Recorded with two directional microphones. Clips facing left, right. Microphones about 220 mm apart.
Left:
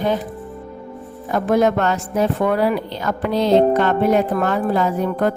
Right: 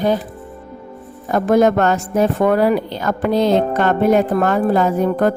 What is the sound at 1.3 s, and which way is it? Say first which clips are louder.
A woman's voice: right 3 dB; 45° right (ahead or behind).